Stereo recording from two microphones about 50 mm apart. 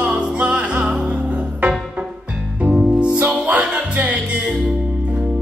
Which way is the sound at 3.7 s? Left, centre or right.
Right.